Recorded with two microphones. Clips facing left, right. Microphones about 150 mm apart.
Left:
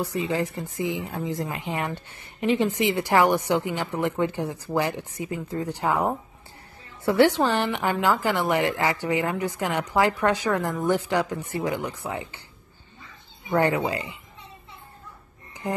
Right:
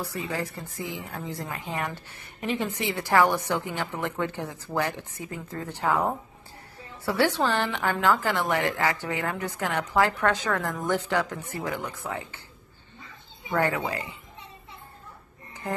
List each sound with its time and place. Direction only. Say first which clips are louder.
0.0 s a woman's voice: left 5 dB; 20° left (ahead or behind)
13.5 s speech: left 4 dB; 20° left (ahead or behind)
15.6 s a woman's voice: left 2 dB; 15° left (ahead or behind)